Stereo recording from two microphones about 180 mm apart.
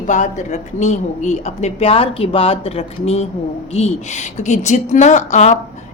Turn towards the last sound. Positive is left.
turn(degrees=40)  # may be behind; listen again after turning